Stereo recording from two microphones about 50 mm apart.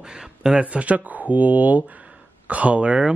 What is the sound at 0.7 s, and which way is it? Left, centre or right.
Speech, right.